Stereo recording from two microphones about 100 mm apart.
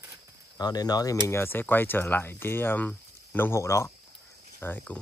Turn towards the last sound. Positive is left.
turn(degrees=20)  # may be behind; listen again after turning